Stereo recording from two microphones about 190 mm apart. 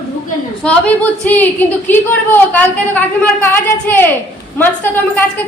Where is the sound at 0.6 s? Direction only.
5° left (ahead or behind).